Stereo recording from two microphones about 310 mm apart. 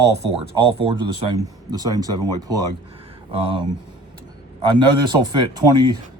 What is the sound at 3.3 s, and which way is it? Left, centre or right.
Speech, centre.